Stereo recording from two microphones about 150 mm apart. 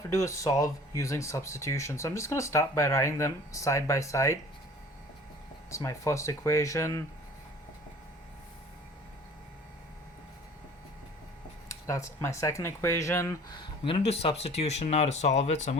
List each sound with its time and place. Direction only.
0.1 s speech: 20° left (ahead or behind)
5.7 s speech: 20° left (ahead or behind)
11.7 s speech: 20° left (ahead or behind); by 15.8 s 50° left (ahead or behind)